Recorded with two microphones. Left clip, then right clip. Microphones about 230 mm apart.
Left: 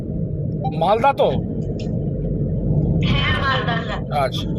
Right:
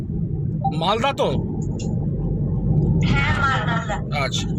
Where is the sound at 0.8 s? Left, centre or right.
Centre.